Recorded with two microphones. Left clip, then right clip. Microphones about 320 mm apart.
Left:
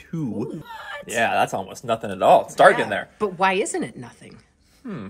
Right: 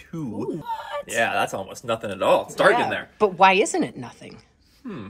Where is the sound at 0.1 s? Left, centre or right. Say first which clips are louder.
Even; centre.